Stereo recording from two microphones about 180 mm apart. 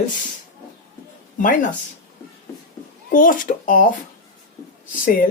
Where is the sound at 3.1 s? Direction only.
50° left (ahead or behind).